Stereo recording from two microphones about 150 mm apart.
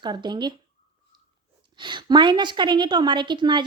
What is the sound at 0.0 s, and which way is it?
Speech, 30° right (ahead or behind).